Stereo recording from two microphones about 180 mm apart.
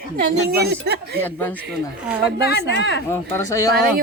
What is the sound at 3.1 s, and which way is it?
Speech, 20° left (ahead or behind).